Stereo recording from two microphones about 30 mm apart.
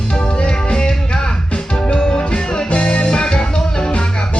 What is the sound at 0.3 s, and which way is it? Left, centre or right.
Music, left.